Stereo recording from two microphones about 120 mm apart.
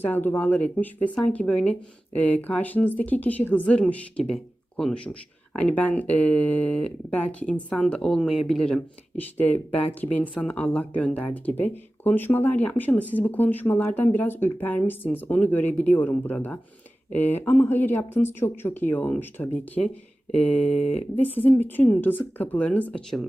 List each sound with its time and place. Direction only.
0.0 s speech: 15° left (ahead or behind)
9.1 s speech: 15° left (ahead or behind)